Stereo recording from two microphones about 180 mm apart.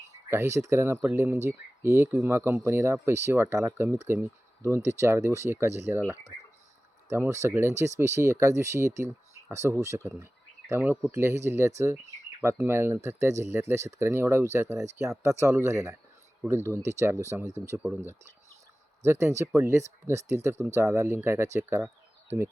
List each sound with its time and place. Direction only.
0.3 s speech: 15° right (ahead or behind)
7.1 s speech: 15° right (ahead or behind)